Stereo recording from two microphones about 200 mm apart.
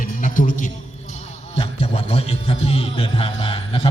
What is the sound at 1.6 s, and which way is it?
Speech, 30° left (ahead or behind).